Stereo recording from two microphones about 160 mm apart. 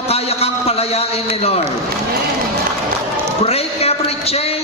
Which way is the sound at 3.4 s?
40° left (ahead or behind).